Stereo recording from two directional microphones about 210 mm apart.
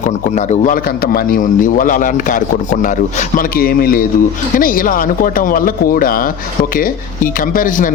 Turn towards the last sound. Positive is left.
turn(degrees=40)  # may be behind; listen again after turning